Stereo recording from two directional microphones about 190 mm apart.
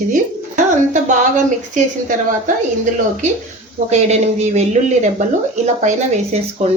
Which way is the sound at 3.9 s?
35° right (ahead or behind).